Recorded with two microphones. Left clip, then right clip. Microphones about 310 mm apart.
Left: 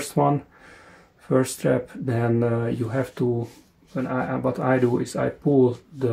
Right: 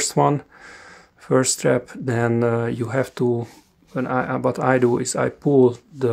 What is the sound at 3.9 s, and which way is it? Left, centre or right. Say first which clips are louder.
Speech: right 4 dB; right.